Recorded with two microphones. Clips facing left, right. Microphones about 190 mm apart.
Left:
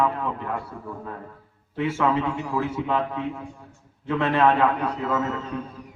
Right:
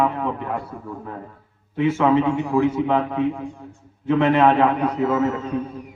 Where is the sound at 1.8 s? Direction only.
20° right (ahead or behind).